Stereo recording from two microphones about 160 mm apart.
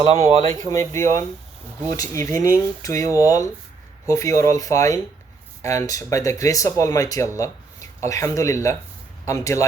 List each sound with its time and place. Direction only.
0.0 s speech: 40° right (ahead or behind)
0.7 s speech: 20° left (ahead or behind)